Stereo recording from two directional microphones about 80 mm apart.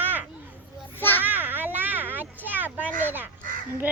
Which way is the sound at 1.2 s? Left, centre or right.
Right.